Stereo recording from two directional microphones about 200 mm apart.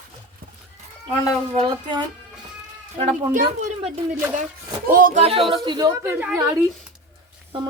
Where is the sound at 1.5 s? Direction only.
20° right (ahead or behind).